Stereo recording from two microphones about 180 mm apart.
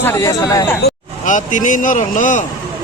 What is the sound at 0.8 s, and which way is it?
Speech, 45° left (ahead or behind).